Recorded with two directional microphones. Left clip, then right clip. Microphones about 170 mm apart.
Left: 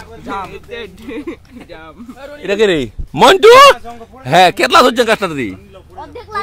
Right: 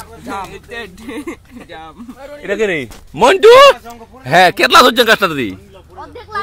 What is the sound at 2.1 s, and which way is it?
Speech, 35° left (ahead or behind).